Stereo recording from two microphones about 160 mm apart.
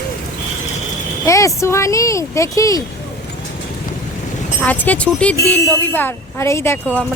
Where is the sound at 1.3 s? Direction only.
20° left (ahead or behind).